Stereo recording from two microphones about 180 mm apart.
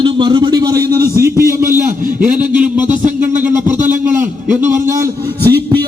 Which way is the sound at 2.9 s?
45° right (ahead or behind).